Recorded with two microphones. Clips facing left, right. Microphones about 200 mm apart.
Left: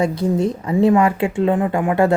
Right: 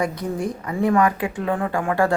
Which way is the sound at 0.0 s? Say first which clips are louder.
Left 6 dB; 25° left (ahead or behind).